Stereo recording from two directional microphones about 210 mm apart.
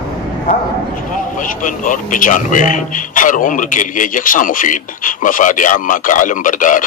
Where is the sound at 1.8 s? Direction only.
40° left (ahead or behind).